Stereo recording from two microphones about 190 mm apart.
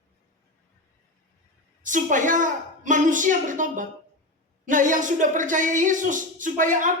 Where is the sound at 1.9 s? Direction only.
45° right (ahead or behind).